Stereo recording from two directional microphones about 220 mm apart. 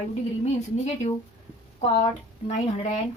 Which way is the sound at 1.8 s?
30° left (ahead or behind).